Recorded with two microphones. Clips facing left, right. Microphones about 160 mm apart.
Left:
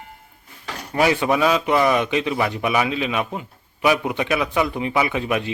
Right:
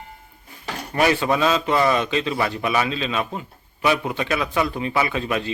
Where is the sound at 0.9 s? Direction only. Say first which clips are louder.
Left 1 dB; 15° left (ahead or behind).